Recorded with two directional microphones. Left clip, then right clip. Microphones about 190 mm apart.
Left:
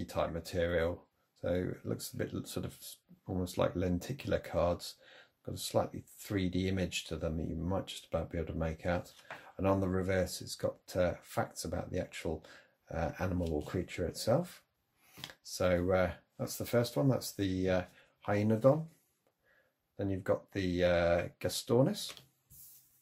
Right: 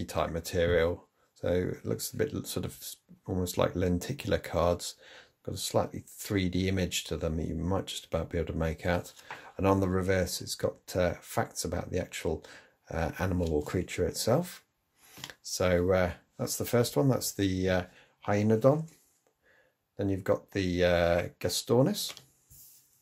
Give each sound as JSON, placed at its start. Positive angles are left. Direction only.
{"t": 0.0, "sound": "speech", "side_deg": -25}
{"t": 20.0, "sound": "speech", "side_deg": -20}